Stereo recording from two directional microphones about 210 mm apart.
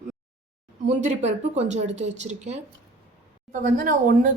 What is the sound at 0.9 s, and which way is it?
Speech, 30° right (ahead or behind).